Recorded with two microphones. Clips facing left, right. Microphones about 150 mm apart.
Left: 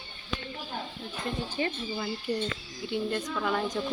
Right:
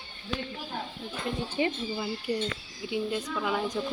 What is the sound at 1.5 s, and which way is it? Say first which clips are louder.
Speech: right 2 dB; 15° right (ahead or behind).